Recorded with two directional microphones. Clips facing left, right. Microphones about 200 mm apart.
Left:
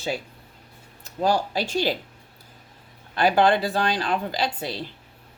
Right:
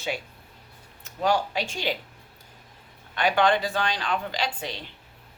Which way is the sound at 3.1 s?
35° left (ahead or behind).